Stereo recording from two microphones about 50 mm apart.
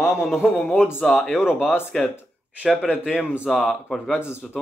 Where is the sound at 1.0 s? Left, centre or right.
Centre.